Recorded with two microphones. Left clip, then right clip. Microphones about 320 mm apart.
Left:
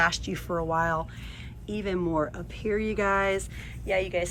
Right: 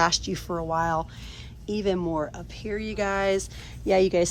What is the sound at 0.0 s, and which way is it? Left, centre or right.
Speech, centre.